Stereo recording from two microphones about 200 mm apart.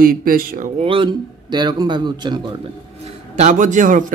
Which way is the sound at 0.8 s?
25° right (ahead or behind).